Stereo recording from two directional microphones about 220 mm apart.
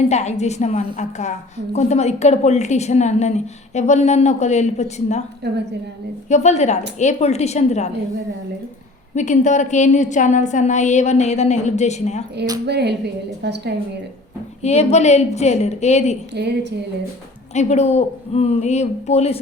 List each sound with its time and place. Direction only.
0.1 s a woman's voice: 30° left (ahead or behind)
5.4 s a woman's voice: 50° right (ahead or behind)
6.2 s a woman's voice: 30° left (ahead or behind)
9.1 s a woman's voice: 35° left (ahead or behind)
12.6 s a woman's voice: 50° right (ahead or behind)
14.6 s a woman's voice: 30° left (ahead or behind)
16.3 s a woman's voice: 50° right (ahead or behind)
17.5 s a woman's voice: 30° left (ahead or behind)